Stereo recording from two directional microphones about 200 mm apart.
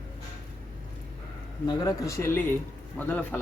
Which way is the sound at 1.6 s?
20° left (ahead or behind).